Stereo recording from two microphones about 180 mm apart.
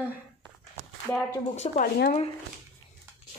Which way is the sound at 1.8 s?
55° left (ahead or behind).